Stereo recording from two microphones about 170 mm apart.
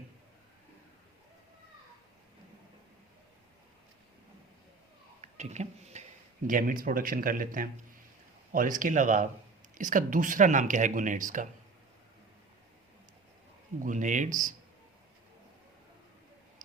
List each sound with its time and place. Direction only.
5.2 s speech: 45° right (ahead or behind)
6.5 s speech: 55° right (ahead or behind)
13.8 s speech: 50° right (ahead or behind)